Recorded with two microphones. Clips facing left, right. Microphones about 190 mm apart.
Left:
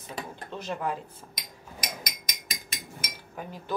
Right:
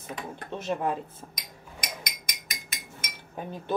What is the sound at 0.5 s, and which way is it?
Speech, 20° right (ahead or behind).